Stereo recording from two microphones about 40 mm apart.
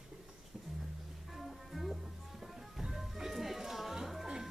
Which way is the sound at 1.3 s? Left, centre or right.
Centre.